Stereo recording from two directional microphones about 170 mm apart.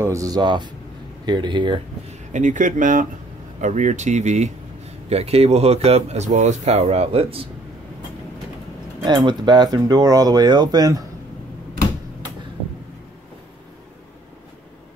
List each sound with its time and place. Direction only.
0.0 s speech: 20° right (ahead or behind)
2.3 s speech: 45° right (ahead or behind)
9.0 s speech: 25° right (ahead or behind)